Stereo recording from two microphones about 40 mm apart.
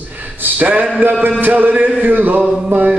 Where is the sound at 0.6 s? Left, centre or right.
Right.